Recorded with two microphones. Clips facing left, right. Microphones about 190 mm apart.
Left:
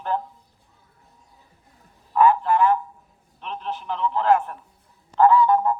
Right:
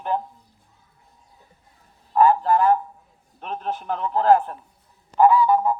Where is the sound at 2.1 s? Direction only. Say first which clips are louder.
Right 1 dB; 35° right (ahead or behind).